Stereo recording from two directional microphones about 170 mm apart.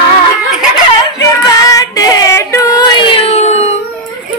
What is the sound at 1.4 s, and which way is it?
Child singing, 25° left (ahead or behind).